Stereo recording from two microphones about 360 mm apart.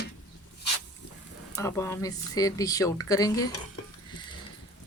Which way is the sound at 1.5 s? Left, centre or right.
Centre.